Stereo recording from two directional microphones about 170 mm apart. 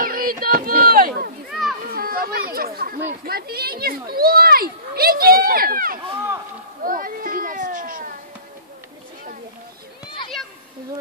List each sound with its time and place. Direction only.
0.0 s a sound: 55° right (ahead or behind)
1.5 s children playing: centre (ahead or behind)
1.9 s chatter: 60° right (ahead or behind)
3.3 s speech: 65° right (ahead or behind)
6.8 s children playing: 55° right (ahead or behind)